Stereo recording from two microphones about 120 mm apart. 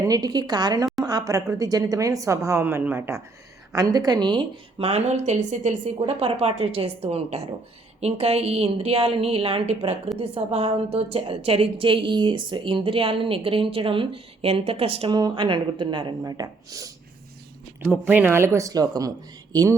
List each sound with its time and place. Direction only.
0.0 s a woman's voice: 30° right (ahead or behind)
3.7 s speech: 30° right (ahead or behind)
4.8 s a woman's voice: 60° right (ahead or behind); by 5.7 s 80° right
6.1 s a woman's voice: 55° right (ahead or behind); by 16.9 s 30° right (ahead or behind)
18.0 s a woman's voice: 15° right (ahead or behind); by 19.1 s 30° right (ahead or behind)